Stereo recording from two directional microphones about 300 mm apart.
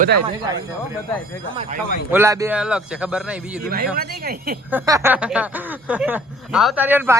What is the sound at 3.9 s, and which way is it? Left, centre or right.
Speech, right.